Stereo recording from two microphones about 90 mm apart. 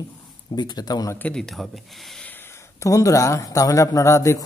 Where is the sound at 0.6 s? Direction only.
50° left (ahead or behind).